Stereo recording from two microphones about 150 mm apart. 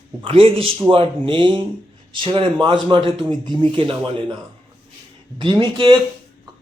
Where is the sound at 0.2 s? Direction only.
35° right (ahead or behind).